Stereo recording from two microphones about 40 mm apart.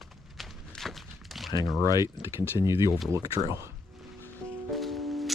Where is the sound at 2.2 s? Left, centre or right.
Right.